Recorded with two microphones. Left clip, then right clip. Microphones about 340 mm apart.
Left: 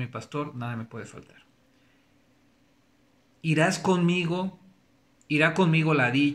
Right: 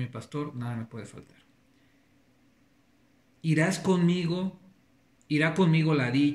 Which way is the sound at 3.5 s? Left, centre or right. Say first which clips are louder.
Left 3 dB; centre.